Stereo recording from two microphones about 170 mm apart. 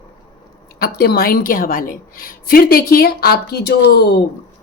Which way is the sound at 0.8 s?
65° left (ahead or behind).